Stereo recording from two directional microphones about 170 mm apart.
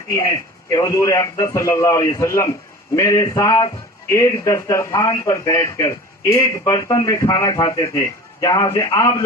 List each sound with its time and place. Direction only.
0.1 s a man's voice: 15° left (ahead or behind)